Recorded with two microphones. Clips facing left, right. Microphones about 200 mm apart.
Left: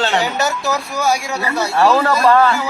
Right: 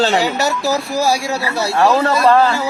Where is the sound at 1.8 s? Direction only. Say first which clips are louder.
Even; 20° right (ahead or behind).